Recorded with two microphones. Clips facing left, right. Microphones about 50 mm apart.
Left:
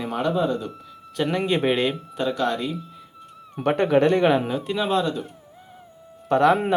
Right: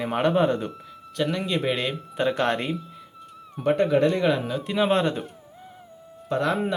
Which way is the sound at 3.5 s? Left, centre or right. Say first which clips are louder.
Left 1 dB; left.